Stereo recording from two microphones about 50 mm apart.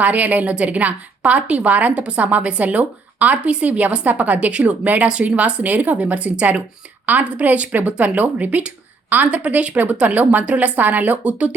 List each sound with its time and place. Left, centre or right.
0.0 s a woman's voice: right